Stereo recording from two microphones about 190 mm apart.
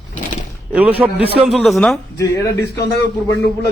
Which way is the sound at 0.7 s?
10° right (ahead or behind).